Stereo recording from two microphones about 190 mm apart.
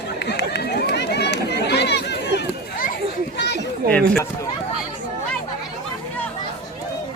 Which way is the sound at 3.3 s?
60° left (ahead or behind).